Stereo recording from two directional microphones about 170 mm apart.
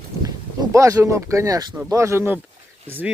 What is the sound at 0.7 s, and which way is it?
Speech, 15° right (ahead or behind).